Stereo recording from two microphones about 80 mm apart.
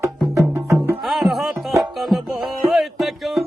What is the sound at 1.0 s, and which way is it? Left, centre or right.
Music, centre.